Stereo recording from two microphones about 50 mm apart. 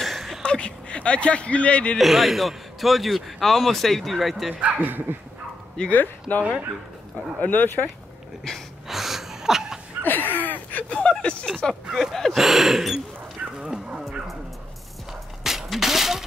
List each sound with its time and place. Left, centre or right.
0.0 s a sound: centre
0.4 s speech: left
2.0 s a man's voice: centre
4.6 s speech: right
5.9 s speech: left
8.5 s speech: centre
8.8 s gasp: centre
10.0 s a sound: left; by 11.7 s centre
11.9 s a man's voice: centre
13.6 s dog: centre
15.4 s shatter: centre